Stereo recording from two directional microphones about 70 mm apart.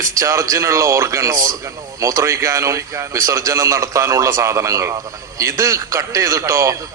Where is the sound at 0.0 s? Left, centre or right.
Right.